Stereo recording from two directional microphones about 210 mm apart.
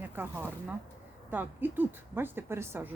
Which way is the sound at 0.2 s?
10° right (ahead or behind).